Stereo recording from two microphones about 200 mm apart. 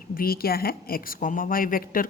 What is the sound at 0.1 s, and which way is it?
A woman's voice, 50° left (ahead or behind).